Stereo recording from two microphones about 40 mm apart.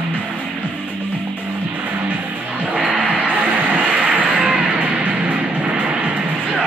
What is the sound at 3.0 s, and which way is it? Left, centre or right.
Music, right.